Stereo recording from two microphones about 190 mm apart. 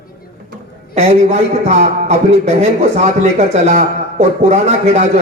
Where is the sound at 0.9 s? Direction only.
35° right (ahead or behind).